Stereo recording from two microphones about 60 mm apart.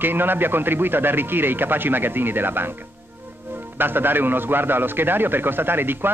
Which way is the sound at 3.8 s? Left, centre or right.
Right.